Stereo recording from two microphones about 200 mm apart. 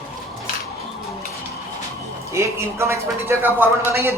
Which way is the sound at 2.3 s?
15° right (ahead or behind).